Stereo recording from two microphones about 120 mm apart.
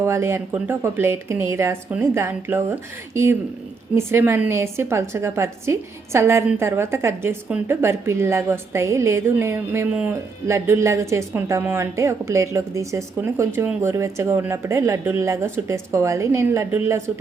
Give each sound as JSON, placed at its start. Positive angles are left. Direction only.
{"t": 0.0, "sound": "a woman's voice", "side_deg": -25}
{"t": 3.9, "sound": "a woman's voice", "side_deg": -20}